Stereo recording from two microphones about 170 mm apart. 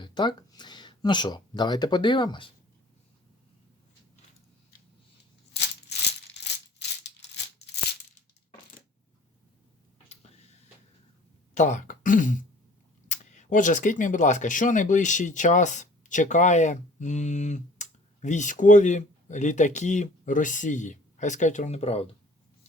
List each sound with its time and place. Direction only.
0.0 s speech: 25° left (ahead or behind)
6.4 s maraca: 90° left
11.5 s speech: 45° left (ahead or behind)